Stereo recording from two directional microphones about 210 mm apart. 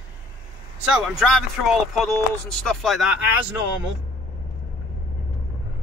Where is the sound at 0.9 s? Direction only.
Centre (ahead or behind).